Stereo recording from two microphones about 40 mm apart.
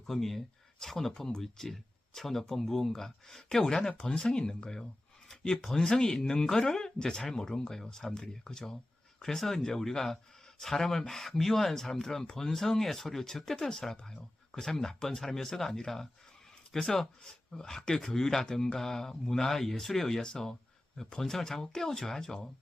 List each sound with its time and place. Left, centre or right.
0.0 s speech: centre